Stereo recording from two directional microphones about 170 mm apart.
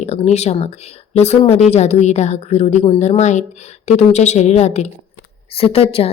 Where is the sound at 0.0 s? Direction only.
40° left (ahead or behind).